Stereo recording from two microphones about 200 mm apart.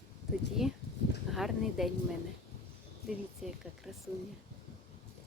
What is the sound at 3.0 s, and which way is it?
Speech, centre (ahead or behind).